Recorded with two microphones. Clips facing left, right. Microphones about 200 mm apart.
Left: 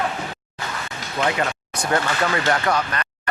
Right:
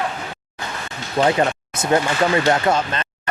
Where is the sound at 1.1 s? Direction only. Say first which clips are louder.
Right 6 dB; 30° right (ahead or behind).